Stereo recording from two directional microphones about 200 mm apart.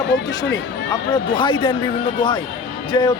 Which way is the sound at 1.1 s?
25° left (ahead or behind).